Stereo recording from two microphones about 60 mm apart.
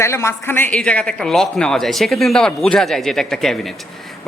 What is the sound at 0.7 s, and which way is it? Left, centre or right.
Speech, left.